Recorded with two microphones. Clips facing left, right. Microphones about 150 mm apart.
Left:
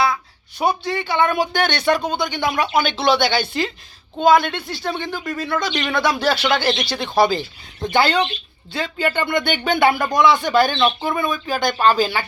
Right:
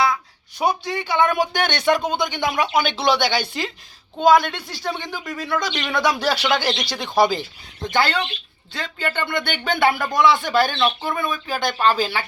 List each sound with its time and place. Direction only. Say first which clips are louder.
0.6 s speech: left 1 dB; 15° right (ahead or behind)
7.9 s speech: left 4 dB; 15° left (ahead or behind); by 12.2 s centre (ahead or behind)